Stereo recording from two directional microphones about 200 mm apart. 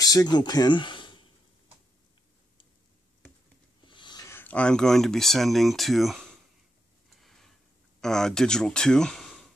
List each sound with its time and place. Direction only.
0.0 s speech: 20° left (ahead or behind)
3.8 s speech: 25° left (ahead or behind); by 6.2 s centre (ahead or behind)
7.1 s a sound: centre (ahead or behind)
8.0 s speech: 5° left (ahead or behind)